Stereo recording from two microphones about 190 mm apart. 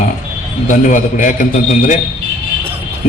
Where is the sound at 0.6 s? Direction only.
45° left (ahead or behind).